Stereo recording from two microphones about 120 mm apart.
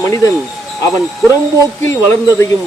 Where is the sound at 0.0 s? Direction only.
25° left (ahead or behind).